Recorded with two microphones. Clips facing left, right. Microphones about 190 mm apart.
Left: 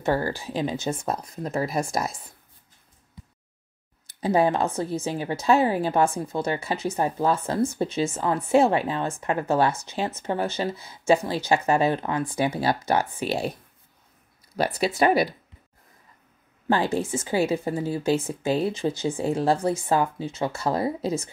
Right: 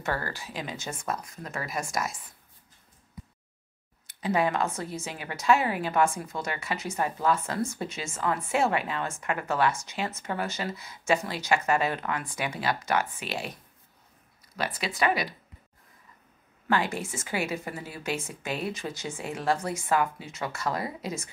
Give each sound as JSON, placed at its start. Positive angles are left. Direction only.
{"t": 0.0, "sound": "speech", "side_deg": 30}
{"t": 4.2, "sound": "speech", "side_deg": 30}
{"t": 14.6, "sound": "speech", "side_deg": 35}
{"t": 16.6, "sound": "speech", "side_deg": 30}